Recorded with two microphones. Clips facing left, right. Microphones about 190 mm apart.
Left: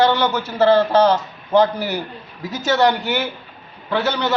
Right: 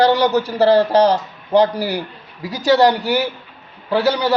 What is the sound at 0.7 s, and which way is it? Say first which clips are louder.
Speech: right 1 dB; 15° right (ahead or behind).